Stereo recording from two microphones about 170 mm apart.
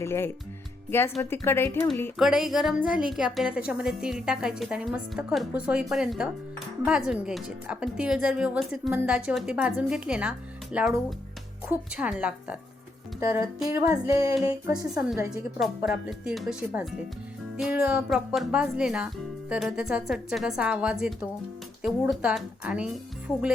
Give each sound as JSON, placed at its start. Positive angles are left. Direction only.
{"t": 0.0, "sound": "a woman's voice", "side_deg": 15}
{"t": 2.1, "sound": "a woman's voice", "side_deg": 0}
{"t": 13.1, "sound": "speech", "side_deg": -20}
{"t": 15.3, "sound": "a woman's voice", "side_deg": -5}